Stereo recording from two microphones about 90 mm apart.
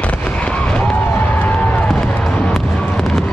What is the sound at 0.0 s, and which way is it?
Fireworks, 10° left (ahead or behind).